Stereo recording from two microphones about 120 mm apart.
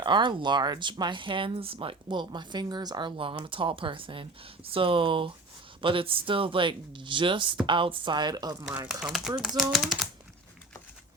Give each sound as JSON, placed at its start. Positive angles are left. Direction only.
{"t": 0.0, "sound": "speech", "side_deg": -40}
{"t": 8.9, "sound": "speech", "side_deg": -5}